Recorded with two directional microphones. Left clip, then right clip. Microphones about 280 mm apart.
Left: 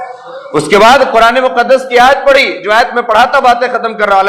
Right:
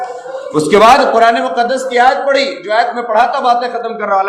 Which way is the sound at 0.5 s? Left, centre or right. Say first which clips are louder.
Left 2 dB; left.